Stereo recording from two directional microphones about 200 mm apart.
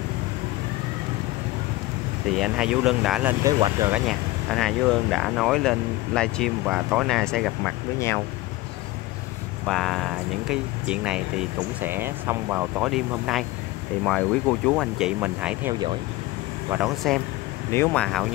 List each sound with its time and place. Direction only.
2.3 s speech: 5° right (ahead or behind)
3.5 s speech: 25° right (ahead or behind)
3.9 s speech: centre (ahead or behind)
9.7 s speech: centre (ahead or behind)
16.7 s speech: centre (ahead or behind)